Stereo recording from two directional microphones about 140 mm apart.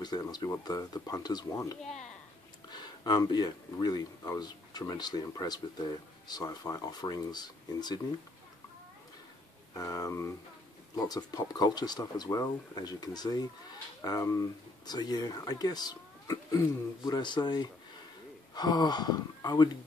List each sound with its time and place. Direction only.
0.0 s speech: 30° left (ahead or behind)
9.8 s speech: 25° left (ahead or behind)